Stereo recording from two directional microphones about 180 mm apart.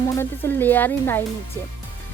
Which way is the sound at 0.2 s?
10° left (ahead or behind).